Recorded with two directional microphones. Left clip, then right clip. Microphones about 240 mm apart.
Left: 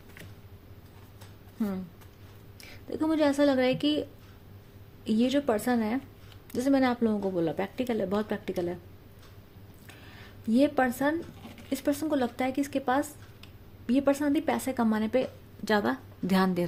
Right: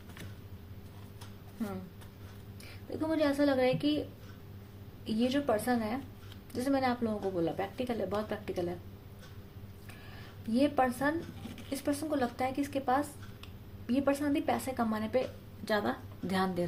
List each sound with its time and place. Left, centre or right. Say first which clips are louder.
2.6 s speech: left 5 dB; left
5.0 s speech: left 4 dB; left
10.5 s speech: left 4 dB; left